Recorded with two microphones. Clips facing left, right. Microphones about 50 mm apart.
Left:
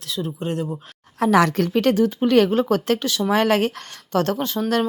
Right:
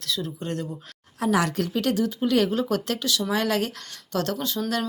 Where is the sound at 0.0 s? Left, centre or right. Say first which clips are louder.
Left 2 dB; centre.